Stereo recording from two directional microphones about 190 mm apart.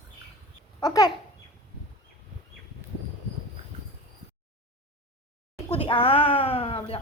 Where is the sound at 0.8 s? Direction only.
20° left (ahead or behind).